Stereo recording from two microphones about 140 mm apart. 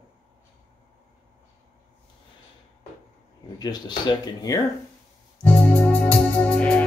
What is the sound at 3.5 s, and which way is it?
Speech, 30° left (ahead or behind).